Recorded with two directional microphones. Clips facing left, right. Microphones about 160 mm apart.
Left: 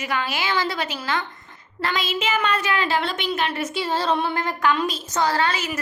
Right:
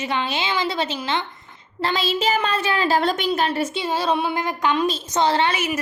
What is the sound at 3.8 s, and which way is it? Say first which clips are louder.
Speech: left 2 dB; 15° right (ahead or behind).